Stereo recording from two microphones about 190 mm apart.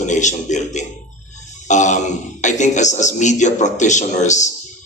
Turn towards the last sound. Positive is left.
turn(degrees=40)  # may be behind; listen again after turning